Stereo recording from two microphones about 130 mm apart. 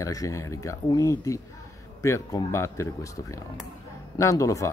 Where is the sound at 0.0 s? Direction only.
25° left (ahead or behind).